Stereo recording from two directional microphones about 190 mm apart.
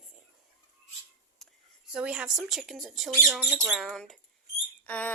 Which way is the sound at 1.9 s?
5° right (ahead or behind).